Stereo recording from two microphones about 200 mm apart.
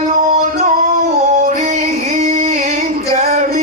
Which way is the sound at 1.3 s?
35° right (ahead or behind).